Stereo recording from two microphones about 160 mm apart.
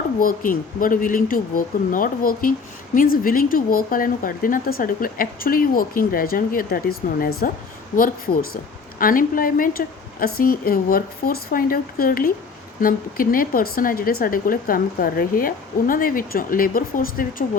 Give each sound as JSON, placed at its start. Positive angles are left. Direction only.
{"t": 0.2, "sound": "speech", "side_deg": 60}